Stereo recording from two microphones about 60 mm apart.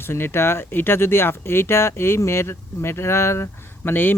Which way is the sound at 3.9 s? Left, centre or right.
Left.